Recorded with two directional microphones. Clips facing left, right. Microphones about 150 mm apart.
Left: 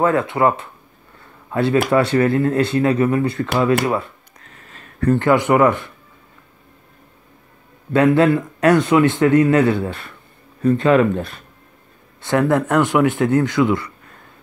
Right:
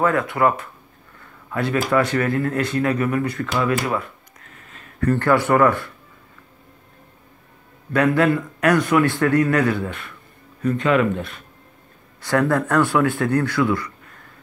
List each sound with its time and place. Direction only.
0.0 s a man's voice: 25° left (ahead or behind)
5.0 s a man's voice: 20° left (ahead or behind)
7.9 s a man's voice: 25° left (ahead or behind)
12.2 s a man's voice: 20° left (ahead or behind)